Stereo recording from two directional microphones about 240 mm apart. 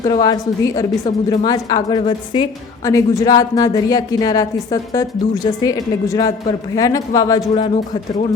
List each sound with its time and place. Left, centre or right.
0.0 s a woman's voice: centre
1.0 s a woman's voice: left
1.5 s a woman's voice: centre